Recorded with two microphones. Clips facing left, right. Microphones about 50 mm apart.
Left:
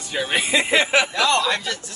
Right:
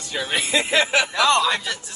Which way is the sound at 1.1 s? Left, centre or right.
Right.